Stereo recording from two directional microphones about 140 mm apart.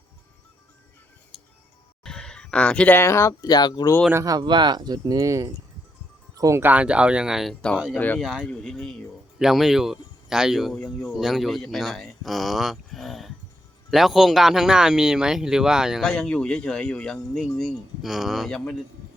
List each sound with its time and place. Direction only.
1.3 s music: centre (ahead or behind)
2.0 s speech: 5° left (ahead or behind); by 3.9 s 30° left (ahead or behind)
4.1 s speech: 25° right (ahead or behind); by 7.5 s 5° right (ahead or behind)
7.9 s speech: 10° left (ahead or behind)
8.2 s speech: 5° right (ahead or behind)